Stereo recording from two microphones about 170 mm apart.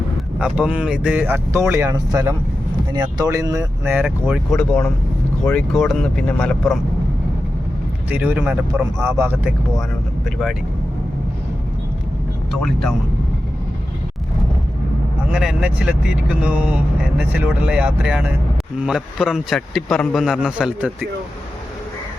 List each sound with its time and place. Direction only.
0.3 s speech: 5° right (ahead or behind)
4.5 s a man's voice: 5° left (ahead or behind)
8.1 s speech: 10° right (ahead or behind)
10.2 s a man's voice: centre (ahead or behind)
12.5 s speech: centre (ahead or behind)
15.3 s a man's voice: 5° right (ahead or behind)